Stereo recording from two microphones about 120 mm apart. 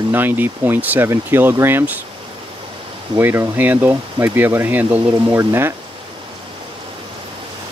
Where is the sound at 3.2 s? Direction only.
20° right (ahead or behind).